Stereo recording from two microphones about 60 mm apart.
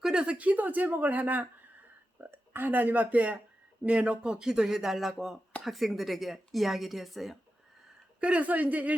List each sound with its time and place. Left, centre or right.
0.0 s speech: centre
8.2 s speech: right